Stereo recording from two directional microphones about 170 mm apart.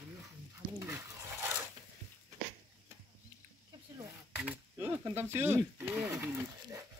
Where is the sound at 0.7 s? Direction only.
15° right (ahead or behind).